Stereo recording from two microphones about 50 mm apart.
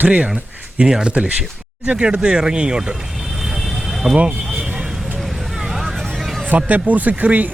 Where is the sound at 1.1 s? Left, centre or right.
Right.